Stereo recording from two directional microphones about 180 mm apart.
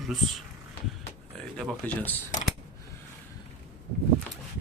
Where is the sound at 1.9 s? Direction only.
10° left (ahead or behind).